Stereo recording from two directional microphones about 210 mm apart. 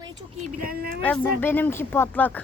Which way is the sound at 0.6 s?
45° right (ahead or behind).